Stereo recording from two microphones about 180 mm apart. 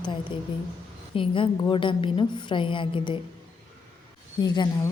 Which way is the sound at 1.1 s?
30° left (ahead or behind).